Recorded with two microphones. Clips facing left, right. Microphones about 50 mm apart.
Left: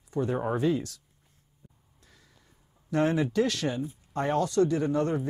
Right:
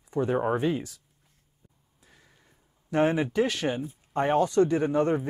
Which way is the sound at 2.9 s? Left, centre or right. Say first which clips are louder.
Right 1 dB; right.